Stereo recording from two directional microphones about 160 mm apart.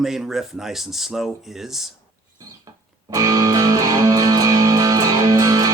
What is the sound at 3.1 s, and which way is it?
Music, 20° right (ahead or behind).